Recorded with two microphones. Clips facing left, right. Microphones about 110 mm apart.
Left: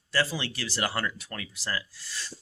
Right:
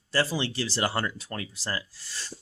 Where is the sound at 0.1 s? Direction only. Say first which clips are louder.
Right 2 dB; 30° right (ahead or behind).